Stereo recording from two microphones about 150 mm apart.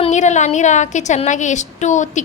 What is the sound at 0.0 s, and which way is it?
A woman's voice, 50° left (ahead or behind).